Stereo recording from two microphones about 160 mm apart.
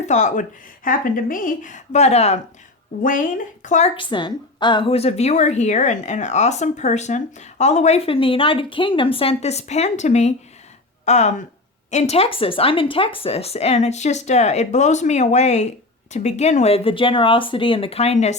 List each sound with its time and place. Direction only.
0.0 s a woman's voice: 50° left (ahead or behind)
3.0 s speech: 55° left (ahead or behind)
3.9 s a woman's voice: 30° left (ahead or behind); by 18.3 s 45° left (ahead or behind)